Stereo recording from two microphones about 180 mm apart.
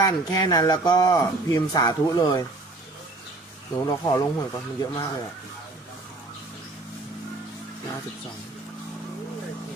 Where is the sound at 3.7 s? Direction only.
20° left (ahead or behind).